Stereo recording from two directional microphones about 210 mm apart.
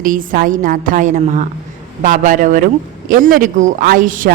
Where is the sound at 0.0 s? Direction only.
40° right (ahead or behind).